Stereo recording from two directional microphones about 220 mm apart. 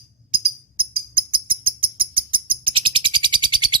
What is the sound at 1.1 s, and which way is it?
Bird, 25° right (ahead or behind).